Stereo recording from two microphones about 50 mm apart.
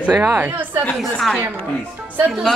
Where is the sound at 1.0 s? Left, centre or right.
Centre.